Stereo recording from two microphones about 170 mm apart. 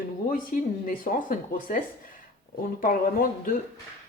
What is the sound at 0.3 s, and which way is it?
Speech, 55° left (ahead or behind).